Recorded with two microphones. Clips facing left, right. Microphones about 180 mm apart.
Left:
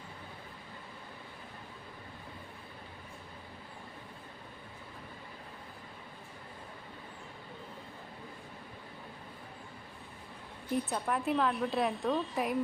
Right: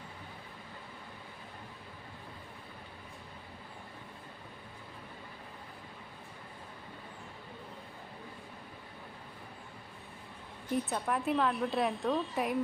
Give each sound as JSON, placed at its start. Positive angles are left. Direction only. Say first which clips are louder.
{"t": 10.7, "sound": "a woman's voice", "louder": "even", "side_deg": 0}